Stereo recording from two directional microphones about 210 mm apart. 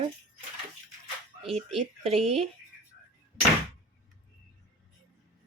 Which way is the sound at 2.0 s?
30° right (ahead or behind).